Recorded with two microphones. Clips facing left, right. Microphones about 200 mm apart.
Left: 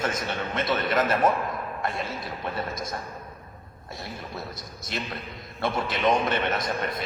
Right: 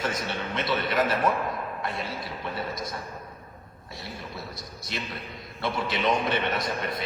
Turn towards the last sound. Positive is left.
turn(degrees=45)  # may be behind; listen again after turning